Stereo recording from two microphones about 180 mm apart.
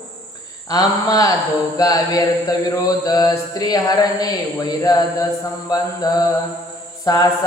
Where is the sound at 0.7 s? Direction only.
20° left (ahead or behind).